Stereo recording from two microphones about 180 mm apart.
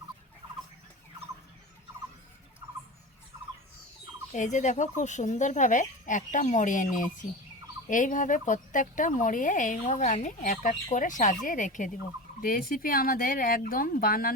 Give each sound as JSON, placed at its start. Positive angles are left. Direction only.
{"t": 4.3, "sound": "speech", "side_deg": 40}